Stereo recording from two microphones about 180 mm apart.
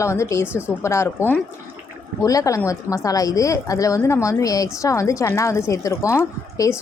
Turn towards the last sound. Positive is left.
turn(degrees=15)  # may be behind; listen again after turning